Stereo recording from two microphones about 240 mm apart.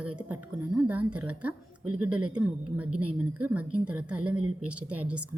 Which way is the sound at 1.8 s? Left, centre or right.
Right.